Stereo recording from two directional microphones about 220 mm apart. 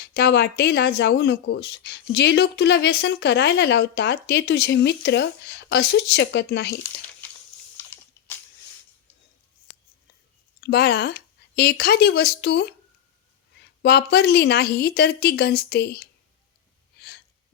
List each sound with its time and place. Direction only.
0.0 s speech: 50° left (ahead or behind)
10.6 s speech: 45° left (ahead or behind)
13.8 s speech: 45° left (ahead or behind)